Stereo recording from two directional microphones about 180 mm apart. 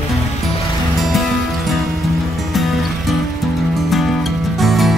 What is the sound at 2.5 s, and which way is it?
Music, centre (ahead or behind).